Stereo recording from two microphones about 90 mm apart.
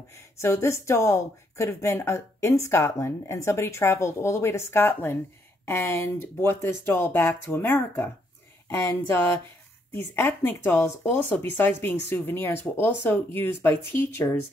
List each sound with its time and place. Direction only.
0.1 s speech: 35° left (ahead or behind)